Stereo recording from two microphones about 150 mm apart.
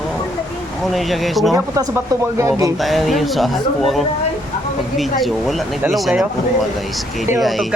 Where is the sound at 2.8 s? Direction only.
Centre (ahead or behind).